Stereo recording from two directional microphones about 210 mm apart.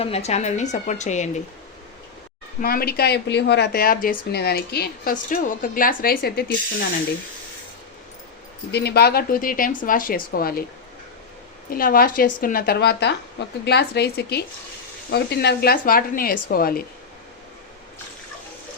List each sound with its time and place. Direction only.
0.0 s a woman's voice: 30° left (ahead or behind)
2.6 s speech: 45° left (ahead or behind)
8.7 s speech: 50° left (ahead or behind)
11.7 s speech: 45° left (ahead or behind)